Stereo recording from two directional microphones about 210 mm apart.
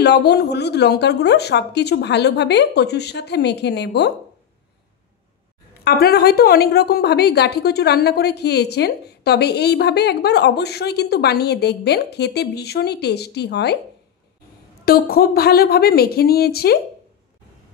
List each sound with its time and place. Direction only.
0.0 s a woman's voice: 50° left (ahead or behind)
5.9 s a woman's voice: 50° left (ahead or behind)
14.9 s a woman's voice: 45° left (ahead or behind)